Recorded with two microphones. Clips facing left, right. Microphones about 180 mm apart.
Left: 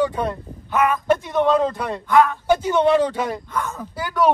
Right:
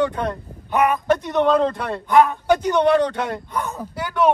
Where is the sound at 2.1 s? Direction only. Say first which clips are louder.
Right 1 dB; 20° right (ahead or behind).